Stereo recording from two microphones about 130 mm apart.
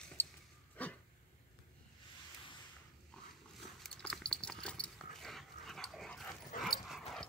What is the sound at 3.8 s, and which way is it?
Dog, 5° left (ahead or behind).